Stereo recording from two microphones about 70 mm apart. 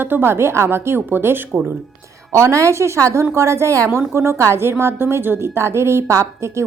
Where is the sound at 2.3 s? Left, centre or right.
Right.